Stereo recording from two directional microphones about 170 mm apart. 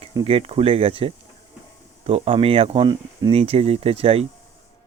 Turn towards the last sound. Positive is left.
turn(degrees=-35)  # may be behind; listen again after turning